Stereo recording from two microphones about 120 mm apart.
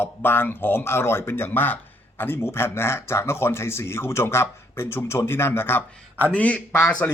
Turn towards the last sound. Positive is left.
turn(degrees=10)  # may be behind; listen again after turning